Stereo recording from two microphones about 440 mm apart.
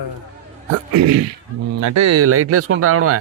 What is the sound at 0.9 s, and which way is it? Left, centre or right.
Speech, right.